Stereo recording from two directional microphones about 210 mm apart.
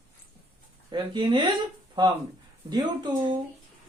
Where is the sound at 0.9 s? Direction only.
25° right (ahead or behind).